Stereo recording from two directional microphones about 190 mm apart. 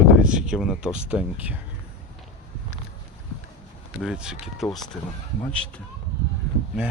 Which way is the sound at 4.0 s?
5° right (ahead or behind).